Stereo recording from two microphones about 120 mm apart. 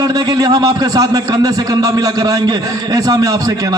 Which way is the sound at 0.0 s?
30° right (ahead or behind).